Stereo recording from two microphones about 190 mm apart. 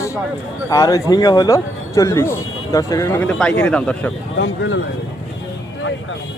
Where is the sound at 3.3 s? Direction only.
5° left (ahead or behind).